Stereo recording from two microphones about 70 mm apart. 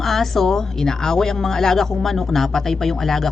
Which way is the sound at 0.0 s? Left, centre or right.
Centre.